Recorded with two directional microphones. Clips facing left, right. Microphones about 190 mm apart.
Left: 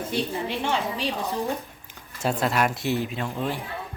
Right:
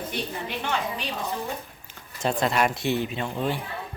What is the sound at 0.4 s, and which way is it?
Speech, 30° left (ahead or behind).